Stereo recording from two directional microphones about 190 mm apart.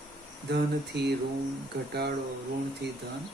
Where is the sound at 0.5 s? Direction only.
60° right (ahead or behind).